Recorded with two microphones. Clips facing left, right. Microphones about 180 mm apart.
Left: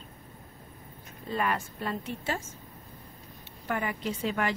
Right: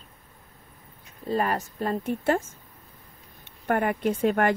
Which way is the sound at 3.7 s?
55° right (ahead or behind).